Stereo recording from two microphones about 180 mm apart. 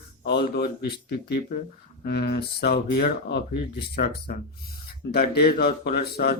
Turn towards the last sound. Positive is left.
turn(degrees=60)  # may be behind; listen again after turning